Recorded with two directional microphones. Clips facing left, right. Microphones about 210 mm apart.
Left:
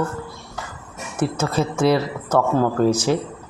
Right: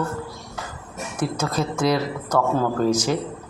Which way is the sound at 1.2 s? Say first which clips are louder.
Left 3 dB; 5° left (ahead or behind).